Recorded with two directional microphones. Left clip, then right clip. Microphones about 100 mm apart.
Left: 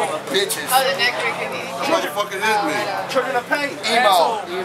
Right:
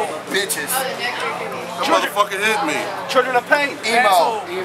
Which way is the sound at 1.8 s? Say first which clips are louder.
Right 4 dB; 10° right (ahead or behind).